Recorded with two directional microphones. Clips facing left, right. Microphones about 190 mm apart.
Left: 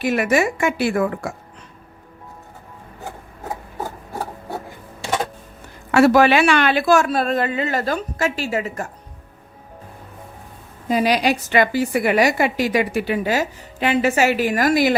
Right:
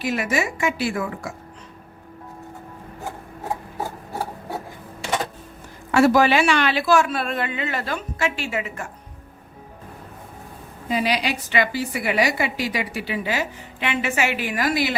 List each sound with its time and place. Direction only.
0.0 s a woman's voice: 55° left (ahead or behind)
5.9 s speech: 65° left (ahead or behind); by 8.9 s 40° left (ahead or behind)
10.8 s a woman's voice: 45° left (ahead or behind)